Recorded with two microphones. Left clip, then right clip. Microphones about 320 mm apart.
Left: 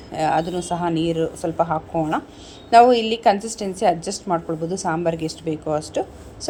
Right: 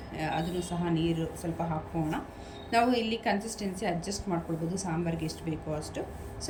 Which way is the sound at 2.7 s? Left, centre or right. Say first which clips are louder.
Left 14 dB; centre.